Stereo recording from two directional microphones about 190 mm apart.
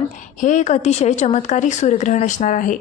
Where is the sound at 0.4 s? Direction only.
40° left (ahead or behind).